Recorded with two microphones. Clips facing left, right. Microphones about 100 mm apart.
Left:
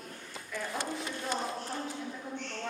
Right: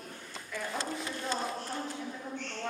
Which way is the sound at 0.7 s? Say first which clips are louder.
Even; 15° left (ahead or behind).